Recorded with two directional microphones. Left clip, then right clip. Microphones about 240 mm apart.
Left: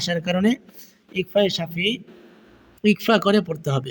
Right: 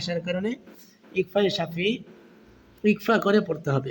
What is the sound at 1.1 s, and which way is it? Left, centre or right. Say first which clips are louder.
Speech: left 3 dB; left.